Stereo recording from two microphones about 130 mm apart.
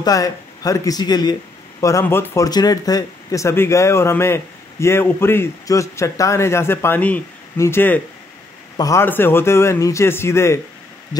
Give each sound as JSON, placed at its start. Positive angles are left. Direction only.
{"t": 0.0, "sound": "speech", "side_deg": 30}
{"t": 8.7, "sound": "a man's voice", "side_deg": 25}
{"t": 9.0, "sound": "speech", "side_deg": 15}